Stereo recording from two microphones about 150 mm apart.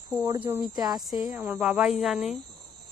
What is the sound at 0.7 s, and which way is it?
Speech, 25° right (ahead or behind).